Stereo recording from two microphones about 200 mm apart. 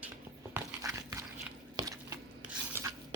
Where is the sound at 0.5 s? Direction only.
15° right (ahead or behind).